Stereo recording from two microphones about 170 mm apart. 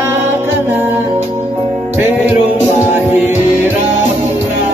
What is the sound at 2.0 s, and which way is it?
Music, 10° right (ahead or behind).